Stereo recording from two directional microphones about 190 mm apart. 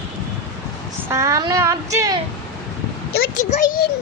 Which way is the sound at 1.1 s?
15° right (ahead or behind).